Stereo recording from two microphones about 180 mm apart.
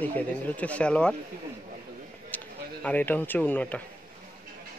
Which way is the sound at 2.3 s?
10° left (ahead or behind).